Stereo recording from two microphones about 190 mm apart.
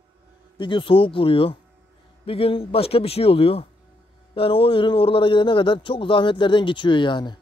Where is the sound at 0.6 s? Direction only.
25° left (ahead or behind).